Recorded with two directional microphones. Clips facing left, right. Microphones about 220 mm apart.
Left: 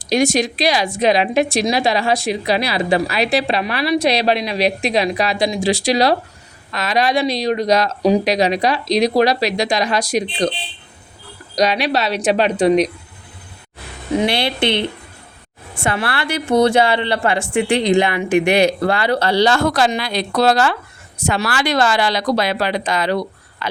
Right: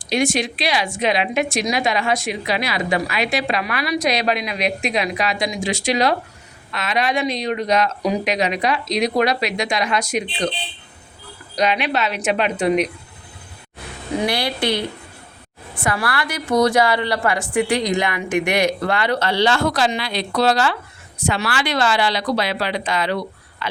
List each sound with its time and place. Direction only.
0.0 s speech: 40° left (ahead or behind)
11.5 s speech: 40° left (ahead or behind)
14.2 s a woman's voice: 25° left (ahead or behind)